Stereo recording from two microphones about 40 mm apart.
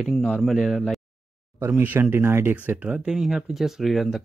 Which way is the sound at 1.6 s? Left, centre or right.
Right.